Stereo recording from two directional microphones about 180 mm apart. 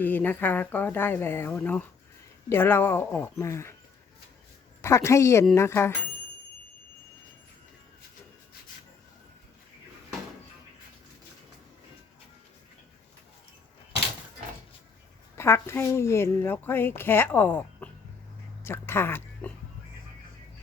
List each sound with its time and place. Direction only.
0.0 s speech: 10° left (ahead or behind)
4.8 s speech: 15° left (ahead or behind)
15.4 s speech: 15° left (ahead or behind)